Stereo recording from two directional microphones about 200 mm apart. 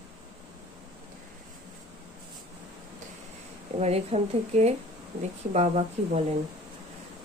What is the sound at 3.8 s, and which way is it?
Speech, 30° right (ahead or behind).